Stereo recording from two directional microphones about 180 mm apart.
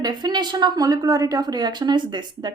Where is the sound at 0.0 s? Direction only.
20° right (ahead or behind).